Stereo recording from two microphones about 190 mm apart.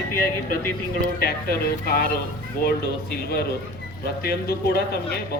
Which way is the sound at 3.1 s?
55° left (ahead or behind).